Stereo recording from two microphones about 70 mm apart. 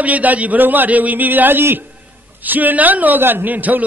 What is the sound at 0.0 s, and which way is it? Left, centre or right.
A man's voice, right.